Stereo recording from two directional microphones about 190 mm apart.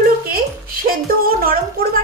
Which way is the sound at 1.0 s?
50° right (ahead or behind).